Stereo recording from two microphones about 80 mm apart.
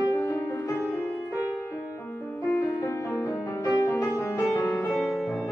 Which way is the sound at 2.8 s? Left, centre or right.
Left.